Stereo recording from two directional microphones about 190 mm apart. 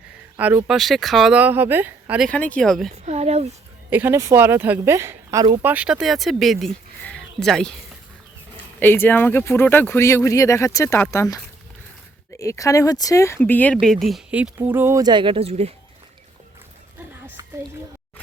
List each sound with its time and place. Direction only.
0.3 s speech: 10° right (ahead or behind)
2.9 s speech: 35° right (ahead or behind)
3.8 s speech: 10° right (ahead or behind)
5.7 s speech: 5° right (ahead or behind)
8.8 s speech: 10° left (ahead or behind)
12.4 s speech: 15° left (ahead or behind); by 15.7 s 30° right (ahead or behind)